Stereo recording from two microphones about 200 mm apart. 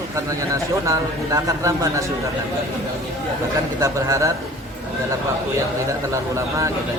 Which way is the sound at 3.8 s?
15° right (ahead or behind).